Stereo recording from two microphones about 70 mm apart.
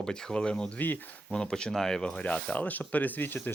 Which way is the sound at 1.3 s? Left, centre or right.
Centre.